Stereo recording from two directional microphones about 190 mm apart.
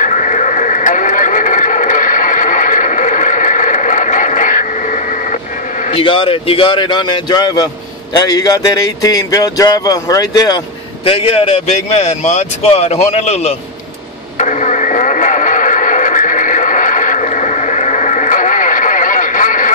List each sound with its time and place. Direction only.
0.0 s radio: 40° left (ahead or behind)
5.9 s speech: 30° left (ahead or behind)
11.1 s speech: 30° left (ahead or behind)
14.4 s radio: 40° left (ahead or behind)